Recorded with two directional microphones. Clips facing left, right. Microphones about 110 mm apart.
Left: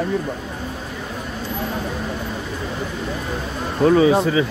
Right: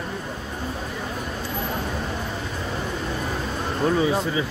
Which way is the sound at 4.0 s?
90° left.